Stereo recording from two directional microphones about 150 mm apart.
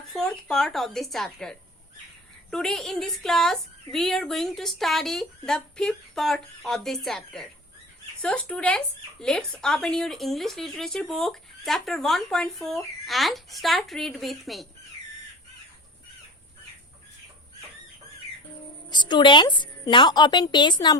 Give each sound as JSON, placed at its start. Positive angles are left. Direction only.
{"t": 0.1, "sound": "speech", "side_deg": 5}
{"t": 18.9, "sound": "a woman's voice", "side_deg": 30}